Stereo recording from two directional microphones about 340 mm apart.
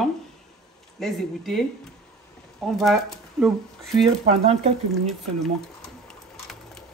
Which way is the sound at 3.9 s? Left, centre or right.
Centre.